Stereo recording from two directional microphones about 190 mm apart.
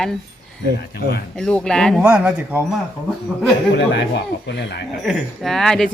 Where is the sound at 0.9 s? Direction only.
55° left (ahead or behind).